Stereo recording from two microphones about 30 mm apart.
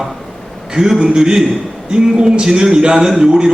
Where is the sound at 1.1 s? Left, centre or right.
Right.